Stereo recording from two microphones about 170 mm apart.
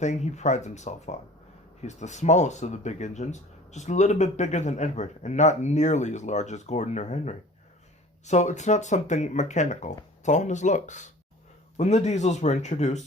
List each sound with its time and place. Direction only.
0.0 s speech: 45° left (ahead or behind)